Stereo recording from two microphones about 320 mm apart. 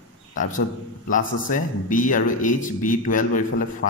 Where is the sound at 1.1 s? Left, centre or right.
Left.